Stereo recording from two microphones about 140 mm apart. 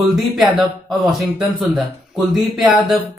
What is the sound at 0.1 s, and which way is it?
Speech, centre (ahead or behind).